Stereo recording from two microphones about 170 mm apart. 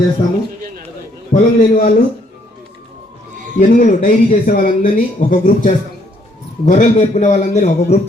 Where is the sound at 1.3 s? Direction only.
45° left (ahead or behind).